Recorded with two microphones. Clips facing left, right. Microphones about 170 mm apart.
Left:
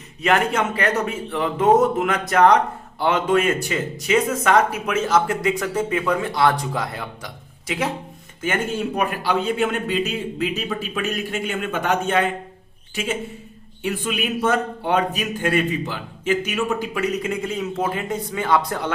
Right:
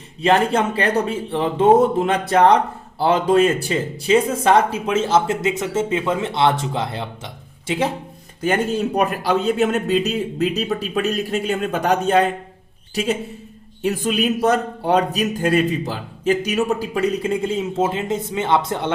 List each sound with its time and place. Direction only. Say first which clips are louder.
0.2 s a man's voice: right 3 dB; 30° right (ahead or behind)
8.4 s a man's voice: right 4 dB; 40° right (ahead or behind)
13.8 s a man's voice: right 5 dB; 40° right (ahead or behind); by 18.9 s 25° right (ahead or behind)